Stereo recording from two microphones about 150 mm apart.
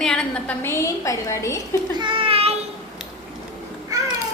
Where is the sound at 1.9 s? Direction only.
35° right (ahead or behind).